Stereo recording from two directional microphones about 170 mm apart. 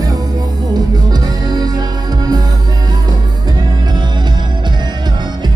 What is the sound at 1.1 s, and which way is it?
Music, 25° right (ahead or behind).